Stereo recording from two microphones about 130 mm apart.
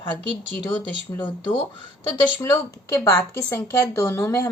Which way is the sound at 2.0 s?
15° left (ahead or behind).